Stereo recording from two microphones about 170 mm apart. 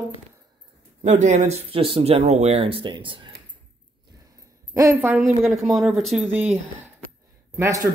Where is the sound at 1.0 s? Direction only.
45° right (ahead or behind).